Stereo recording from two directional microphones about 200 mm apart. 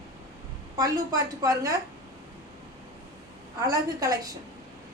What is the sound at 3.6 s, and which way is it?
Speech, 15° right (ahead or behind).